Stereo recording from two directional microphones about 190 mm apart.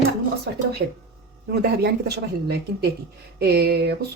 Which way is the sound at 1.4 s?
60° right (ahead or behind).